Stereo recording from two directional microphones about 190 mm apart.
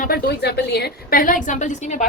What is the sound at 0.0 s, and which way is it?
A woman's voice, 55° left (ahead or behind).